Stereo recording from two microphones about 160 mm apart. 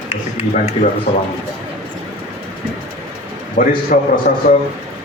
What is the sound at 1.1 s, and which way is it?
Speech, 50° left (ahead or behind).